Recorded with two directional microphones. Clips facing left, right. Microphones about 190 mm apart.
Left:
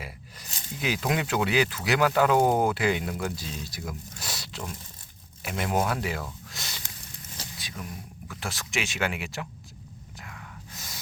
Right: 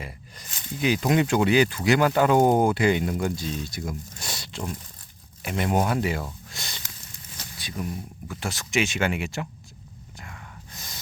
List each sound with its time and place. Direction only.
0.0 s speech: 5° left (ahead or behind)
6.5 s a sound: centre (ahead or behind)
7.6 s speech: centre (ahead or behind)
10.2 s gasp: centre (ahead or behind)